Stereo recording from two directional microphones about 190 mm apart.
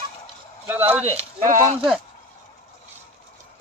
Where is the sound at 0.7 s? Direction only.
10° right (ahead or behind).